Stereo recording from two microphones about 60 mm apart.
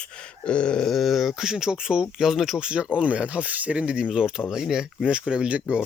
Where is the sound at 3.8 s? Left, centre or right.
Centre.